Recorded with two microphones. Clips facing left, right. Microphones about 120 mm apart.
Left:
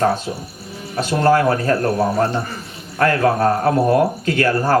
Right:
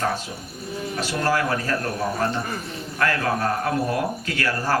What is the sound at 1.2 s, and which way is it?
Speech, 40° left (ahead or behind).